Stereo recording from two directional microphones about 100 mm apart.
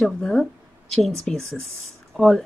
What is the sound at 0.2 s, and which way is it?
Speech, 5° left (ahead or behind).